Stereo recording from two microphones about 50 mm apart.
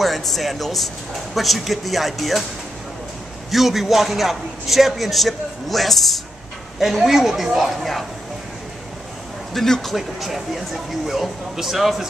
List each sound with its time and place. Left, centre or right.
0.0 s a man's voice: centre
3.5 s a man's voice: centre
9.5 s a man's voice: centre